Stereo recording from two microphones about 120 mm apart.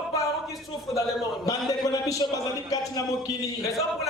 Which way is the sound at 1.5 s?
30° left (ahead or behind).